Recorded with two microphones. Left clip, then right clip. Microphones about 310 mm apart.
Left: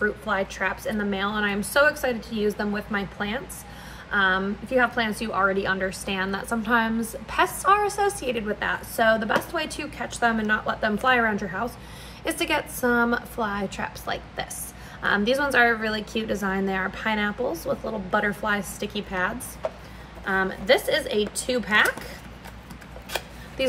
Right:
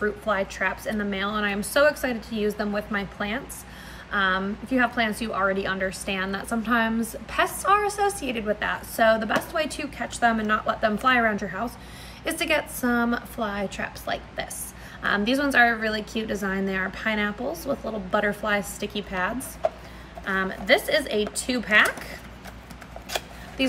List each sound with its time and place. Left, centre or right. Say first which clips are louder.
0.0 s a woman's voice: even; centre